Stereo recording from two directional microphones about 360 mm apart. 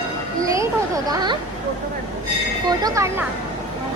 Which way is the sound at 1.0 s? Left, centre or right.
Centre.